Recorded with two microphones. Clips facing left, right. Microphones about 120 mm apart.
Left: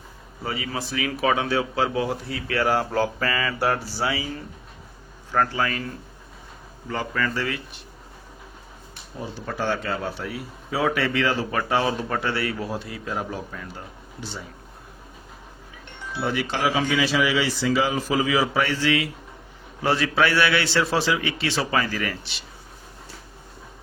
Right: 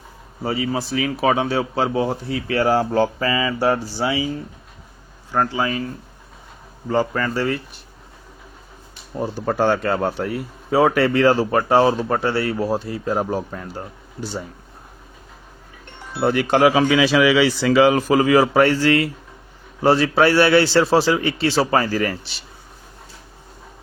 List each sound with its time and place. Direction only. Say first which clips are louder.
0.4 s a man's voice: right 7 dB; 35° right (ahead or behind)
5.3 s speech: right 2 dB; 15° right (ahead or behind)
6.8 s speech: right 7 dB; 35° right (ahead or behind)
9.1 s speech: right 9 dB; 45° right (ahead or behind)
16.1 s speech: right 9 dB; 45° right (ahead or behind)
19.8 s speech: right 6 dB; 35° right (ahead or behind)